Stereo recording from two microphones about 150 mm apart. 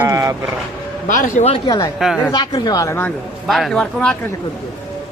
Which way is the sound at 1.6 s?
25° left (ahead or behind).